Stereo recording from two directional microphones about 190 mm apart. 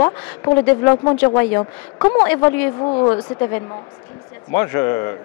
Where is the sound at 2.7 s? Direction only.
25° left (ahead or behind).